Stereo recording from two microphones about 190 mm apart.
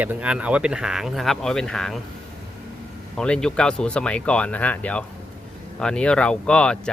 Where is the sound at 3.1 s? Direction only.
5° left (ahead or behind).